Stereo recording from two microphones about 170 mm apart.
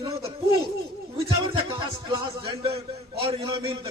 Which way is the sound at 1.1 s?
30° right (ahead or behind).